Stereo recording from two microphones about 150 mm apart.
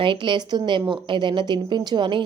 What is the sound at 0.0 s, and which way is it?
A woman's voice, 35° right (ahead or behind).